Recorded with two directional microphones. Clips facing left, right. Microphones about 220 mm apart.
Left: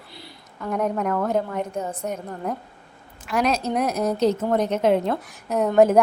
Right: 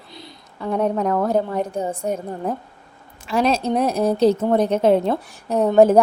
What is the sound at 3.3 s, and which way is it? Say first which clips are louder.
A woman's voice: right 3 dB; 30° right (ahead or behind).